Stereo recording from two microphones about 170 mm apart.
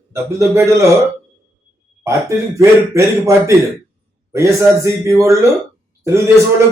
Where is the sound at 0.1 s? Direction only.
15° right (ahead or behind).